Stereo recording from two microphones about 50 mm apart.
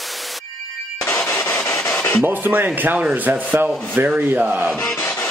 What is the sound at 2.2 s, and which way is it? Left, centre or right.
Speech, right.